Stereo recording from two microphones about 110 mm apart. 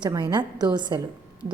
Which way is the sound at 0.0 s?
40° right (ahead or behind).